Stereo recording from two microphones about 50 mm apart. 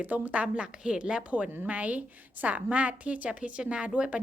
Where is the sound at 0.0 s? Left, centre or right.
Right.